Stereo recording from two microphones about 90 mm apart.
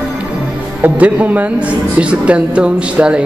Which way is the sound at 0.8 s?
15° right (ahead or behind).